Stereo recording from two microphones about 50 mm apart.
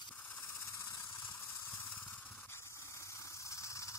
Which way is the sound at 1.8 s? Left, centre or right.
Left.